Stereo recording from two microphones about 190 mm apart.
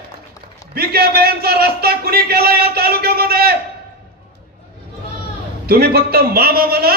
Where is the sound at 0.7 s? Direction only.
55° right (ahead or behind).